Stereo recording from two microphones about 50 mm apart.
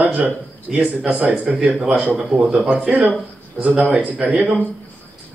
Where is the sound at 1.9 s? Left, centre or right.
Right.